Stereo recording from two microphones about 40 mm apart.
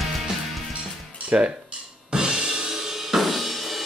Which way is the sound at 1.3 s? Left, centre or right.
Right.